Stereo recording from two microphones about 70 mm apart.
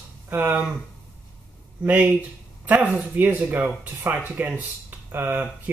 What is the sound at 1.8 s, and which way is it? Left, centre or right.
Speech, right.